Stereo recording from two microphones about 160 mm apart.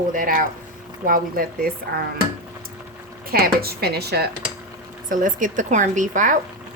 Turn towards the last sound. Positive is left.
turn(degrees=-55)  # may be behind; listen again after turning